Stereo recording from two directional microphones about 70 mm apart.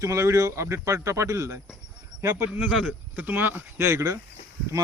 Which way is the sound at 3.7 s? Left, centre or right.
Right.